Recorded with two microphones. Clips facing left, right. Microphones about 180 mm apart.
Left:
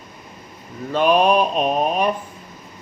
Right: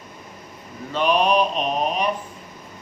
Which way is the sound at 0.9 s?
45° left (ahead or behind).